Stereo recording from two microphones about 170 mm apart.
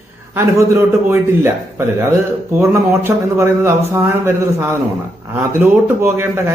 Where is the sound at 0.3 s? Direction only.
15° right (ahead or behind).